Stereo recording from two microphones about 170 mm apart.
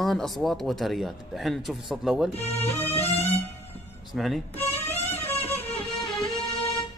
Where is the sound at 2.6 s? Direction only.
10° left (ahead or behind).